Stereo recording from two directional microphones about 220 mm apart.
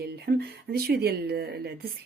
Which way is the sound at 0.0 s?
45° right (ahead or behind).